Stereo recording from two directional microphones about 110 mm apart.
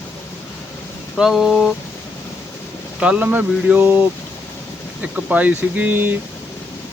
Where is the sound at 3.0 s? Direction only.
15° right (ahead or behind).